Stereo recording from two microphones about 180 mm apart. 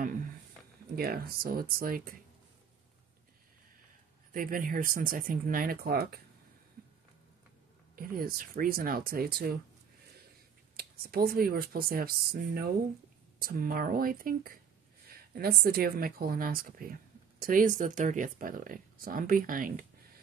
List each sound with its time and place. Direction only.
0.0 s a sound: 45° right (ahead or behind)
0.9 s a woman's voice: 55° right (ahead or behind)
4.3 s a woman's voice: 50° right (ahead or behind)
7.9 s a woman's voice: 55° right (ahead or behind)
10.8 s a woman's voice: 55° right (ahead or behind)